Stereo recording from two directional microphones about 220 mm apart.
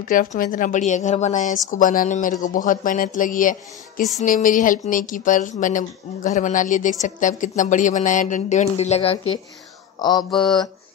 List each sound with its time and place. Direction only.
0.0 s speech: 40° left (ahead or behind)
9.9 s mantra: 20° left (ahead or behind)